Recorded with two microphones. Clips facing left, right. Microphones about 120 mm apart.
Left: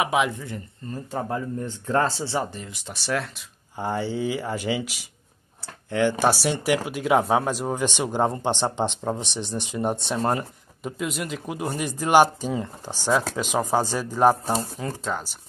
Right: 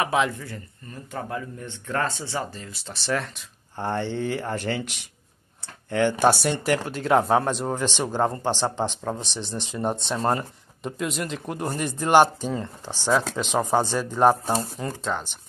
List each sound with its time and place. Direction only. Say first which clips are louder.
0.0 s speech: even; 15° left (ahead or behind)
1.1 s speech: left 4 dB; 30° left (ahead or behind); by 3.1 s 15° left (ahead or behind)
3.1 s speech: even; 5° left (ahead or behind)